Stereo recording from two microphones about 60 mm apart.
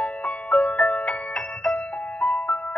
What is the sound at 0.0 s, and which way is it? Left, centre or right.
Music, centre.